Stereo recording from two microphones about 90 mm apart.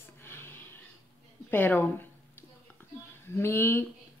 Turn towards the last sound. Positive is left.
turn(degrees=25)  # may be behind; listen again after turning